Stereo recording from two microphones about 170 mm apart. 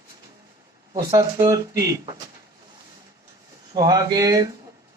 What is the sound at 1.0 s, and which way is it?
Speech, 20° right (ahead or behind).